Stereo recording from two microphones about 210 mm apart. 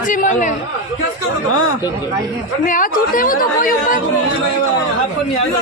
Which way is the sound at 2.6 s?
40° left (ahead or behind).